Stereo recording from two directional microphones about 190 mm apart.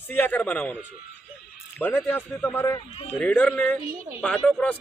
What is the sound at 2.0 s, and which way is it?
Speech, 10° left (ahead or behind).